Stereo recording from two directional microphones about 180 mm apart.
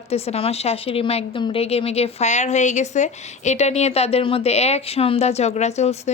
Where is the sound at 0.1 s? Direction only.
35° left (ahead or behind).